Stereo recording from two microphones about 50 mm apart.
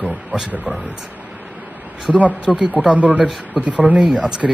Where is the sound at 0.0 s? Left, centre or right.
Right.